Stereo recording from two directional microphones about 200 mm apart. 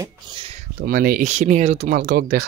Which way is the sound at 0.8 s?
50° right (ahead or behind).